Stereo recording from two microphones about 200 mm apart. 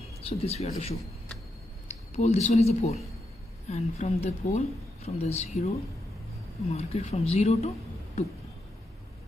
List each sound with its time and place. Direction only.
0.4 s speech: 30° left (ahead or behind)